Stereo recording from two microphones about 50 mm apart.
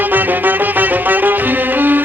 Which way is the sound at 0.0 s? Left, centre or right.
Right.